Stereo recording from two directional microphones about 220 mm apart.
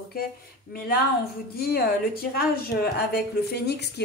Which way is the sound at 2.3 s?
45° left (ahead or behind).